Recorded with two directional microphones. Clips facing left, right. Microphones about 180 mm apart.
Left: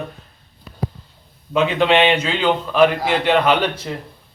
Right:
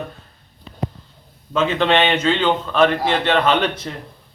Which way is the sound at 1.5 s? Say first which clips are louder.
Left 1 dB; 10° left (ahead or behind).